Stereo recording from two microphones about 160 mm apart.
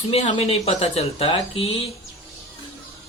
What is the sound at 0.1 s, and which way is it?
Speech, 40° left (ahead or behind).